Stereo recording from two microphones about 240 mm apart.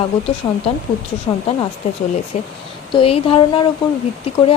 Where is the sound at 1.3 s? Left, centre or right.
Centre.